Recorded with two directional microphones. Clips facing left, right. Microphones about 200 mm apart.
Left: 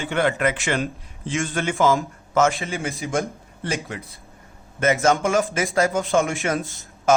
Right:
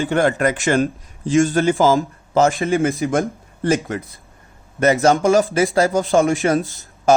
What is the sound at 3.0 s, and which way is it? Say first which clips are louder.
Speech: right 7 dB; 50° right (ahead or behind).